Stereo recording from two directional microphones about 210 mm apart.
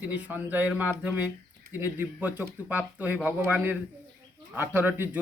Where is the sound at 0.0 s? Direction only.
10° right (ahead or behind).